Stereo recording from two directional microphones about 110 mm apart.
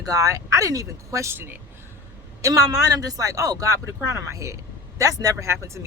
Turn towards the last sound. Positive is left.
turn(degrees=-25)  # may be behind; listen again after turning